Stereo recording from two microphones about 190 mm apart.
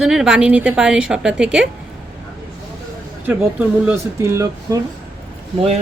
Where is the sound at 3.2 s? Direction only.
10° right (ahead or behind).